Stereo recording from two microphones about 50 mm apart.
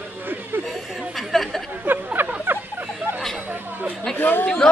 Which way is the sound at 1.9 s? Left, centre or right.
Right.